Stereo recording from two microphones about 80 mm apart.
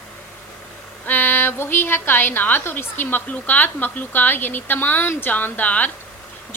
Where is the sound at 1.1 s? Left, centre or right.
Left.